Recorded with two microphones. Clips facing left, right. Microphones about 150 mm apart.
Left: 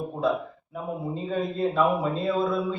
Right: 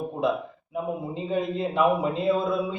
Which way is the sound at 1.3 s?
20° right (ahead or behind).